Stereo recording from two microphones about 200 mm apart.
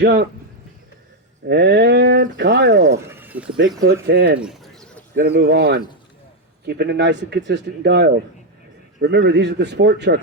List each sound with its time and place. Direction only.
0.0 s speech: 55° right (ahead or behind)
1.5 s speech: 55° right (ahead or behind)
3.1 s a sound: 10° right (ahead or behind)
3.8 s speech: 60° right (ahead or behind)
4.4 s bird: centre (ahead or behind)
5.1 s speech: 50° right (ahead or behind)